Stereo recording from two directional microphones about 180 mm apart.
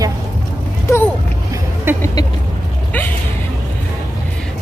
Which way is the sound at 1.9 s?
10° right (ahead or behind).